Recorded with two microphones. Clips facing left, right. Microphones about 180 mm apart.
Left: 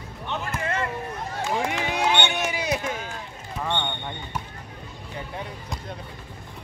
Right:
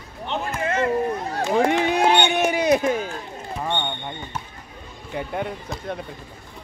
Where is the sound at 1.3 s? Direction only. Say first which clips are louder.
Right 6 dB; 60° right (ahead or behind).